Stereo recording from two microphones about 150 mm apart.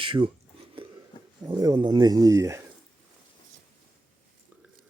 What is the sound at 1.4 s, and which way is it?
Speech, 25° right (ahead or behind).